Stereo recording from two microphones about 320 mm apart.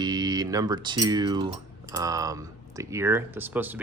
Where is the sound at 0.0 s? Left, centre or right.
Centre.